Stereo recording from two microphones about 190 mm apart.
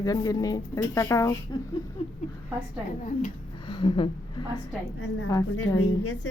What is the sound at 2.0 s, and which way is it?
Speech, 30° left (ahead or behind).